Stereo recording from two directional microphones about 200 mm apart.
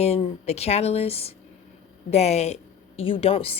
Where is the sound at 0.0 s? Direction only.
30° left (ahead or behind).